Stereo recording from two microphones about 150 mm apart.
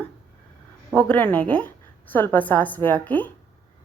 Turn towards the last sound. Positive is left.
turn(degrees=10)  # may be behind; listen again after turning